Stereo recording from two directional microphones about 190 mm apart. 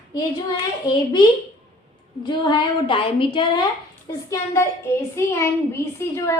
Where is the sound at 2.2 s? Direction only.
25° left (ahead or behind).